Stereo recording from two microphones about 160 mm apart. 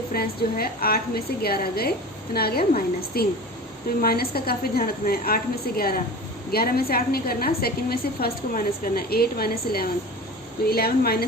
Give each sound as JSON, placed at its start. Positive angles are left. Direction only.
{"t": 0.1, "sound": "a woman's voice", "side_deg": 70}